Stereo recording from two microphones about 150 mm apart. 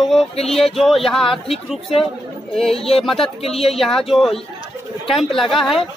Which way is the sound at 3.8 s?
Centre (ahead or behind).